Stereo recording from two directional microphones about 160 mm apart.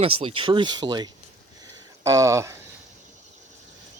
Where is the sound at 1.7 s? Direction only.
20° right (ahead or behind).